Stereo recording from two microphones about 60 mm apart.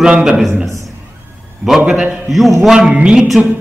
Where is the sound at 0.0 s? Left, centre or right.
Centre.